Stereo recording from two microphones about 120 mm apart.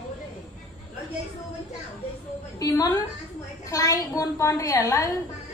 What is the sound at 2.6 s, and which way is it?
A woman's voice, 30° left (ahead or behind).